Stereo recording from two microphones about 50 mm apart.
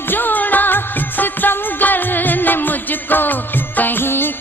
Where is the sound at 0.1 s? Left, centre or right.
Left.